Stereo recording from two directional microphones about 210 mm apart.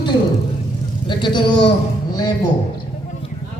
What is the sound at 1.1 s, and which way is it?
Speech, 20° left (ahead or behind).